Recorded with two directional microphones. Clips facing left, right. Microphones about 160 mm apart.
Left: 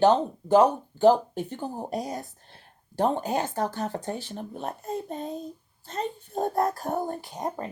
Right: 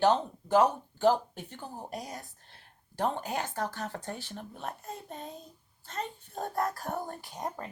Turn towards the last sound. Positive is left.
turn(degrees=25)  # may be behind; listen again after turning